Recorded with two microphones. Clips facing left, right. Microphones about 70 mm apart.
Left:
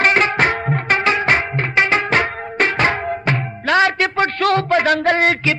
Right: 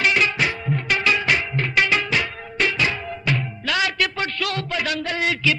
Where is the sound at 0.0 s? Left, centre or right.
Left.